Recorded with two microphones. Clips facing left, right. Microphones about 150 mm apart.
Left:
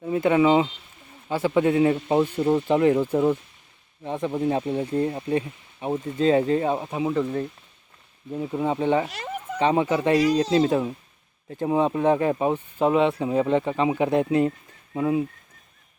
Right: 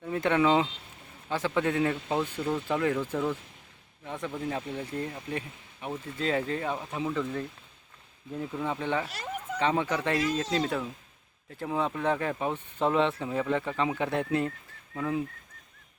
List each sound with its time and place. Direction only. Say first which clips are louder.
0.0 s speech: left 6 dB; 10° left (ahead or behind)
2.4 s speech: left 9 dB; 30° left (ahead or behind)